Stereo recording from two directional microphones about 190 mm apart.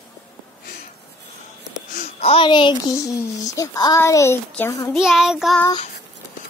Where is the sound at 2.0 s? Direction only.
30° left (ahead or behind); by 4.8 s 15° left (ahead or behind).